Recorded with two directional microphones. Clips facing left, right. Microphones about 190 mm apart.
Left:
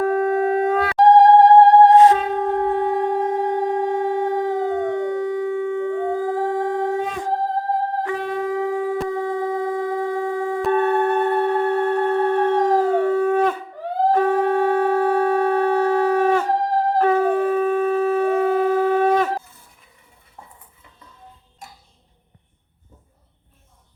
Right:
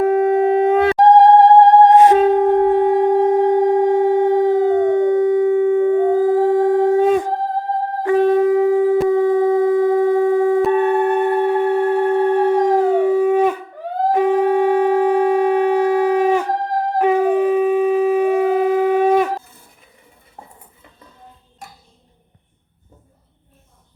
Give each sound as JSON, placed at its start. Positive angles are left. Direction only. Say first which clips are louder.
{"t": 0.0, "sound": "wind instrument", "louder": "right 4 dB", "side_deg": -20}
{"t": 1.8, "sound": "music", "louder": "right 2 dB", "side_deg": -15}
{"t": 6.1, "sound": "howl", "louder": "right 8 dB", "side_deg": -20}
{"t": 8.4, "sound": "a sound", "louder": "right 9 dB", "side_deg": -25}
{"t": 10.6, "sound": "wind instrument", "louder": "right 4 dB", "side_deg": -10}
{"t": 14.1, "sound": "shofar", "louder": "right 4 dB", "side_deg": -10}